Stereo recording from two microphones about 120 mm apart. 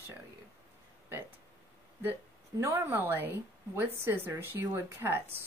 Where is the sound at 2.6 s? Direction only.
20° right (ahead or behind).